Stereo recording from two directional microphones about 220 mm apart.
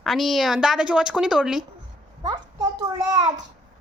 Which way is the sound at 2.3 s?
20° right (ahead or behind).